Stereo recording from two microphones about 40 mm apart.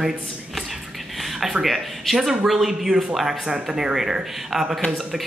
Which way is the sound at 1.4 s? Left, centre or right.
Centre.